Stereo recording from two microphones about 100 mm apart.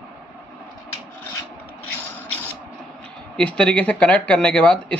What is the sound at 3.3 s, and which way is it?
Speech, 10° left (ahead or behind).